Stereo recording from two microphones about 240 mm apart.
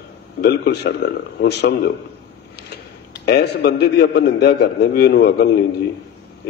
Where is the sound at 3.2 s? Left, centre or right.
Left.